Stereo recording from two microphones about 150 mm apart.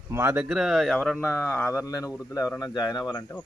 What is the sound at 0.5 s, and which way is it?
Speech, centre (ahead or behind).